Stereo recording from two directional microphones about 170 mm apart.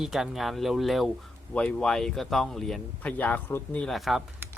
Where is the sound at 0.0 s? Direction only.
Centre (ahead or behind).